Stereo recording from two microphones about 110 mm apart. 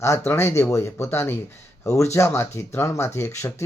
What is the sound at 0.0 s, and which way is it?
Speech, 25° left (ahead or behind).